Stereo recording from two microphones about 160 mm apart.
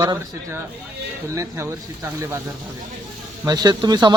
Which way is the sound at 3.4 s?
25° right (ahead or behind).